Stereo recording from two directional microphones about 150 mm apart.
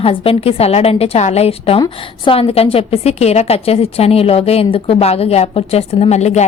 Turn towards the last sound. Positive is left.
turn(degrees=50)  # may be behind; listen again after turning